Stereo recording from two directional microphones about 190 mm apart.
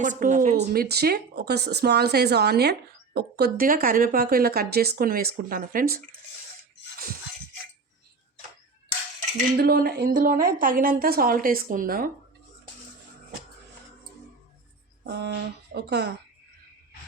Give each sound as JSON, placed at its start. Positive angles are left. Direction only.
{"t": 0.0, "sound": "speech", "side_deg": -40}
{"t": 0.5, "sound": "a woman's voice", "side_deg": -55}
{"t": 9.6, "sound": "speech", "side_deg": -55}
{"t": 15.0, "sound": "a woman's voice", "side_deg": -60}